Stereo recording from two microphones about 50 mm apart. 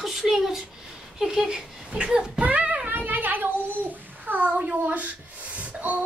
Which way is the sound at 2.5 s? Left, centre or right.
Right.